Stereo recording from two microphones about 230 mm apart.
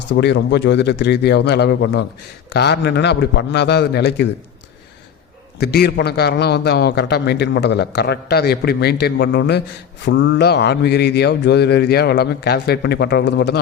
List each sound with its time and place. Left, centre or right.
0.2 s a man's voice: left
5.5 s a man's voice: left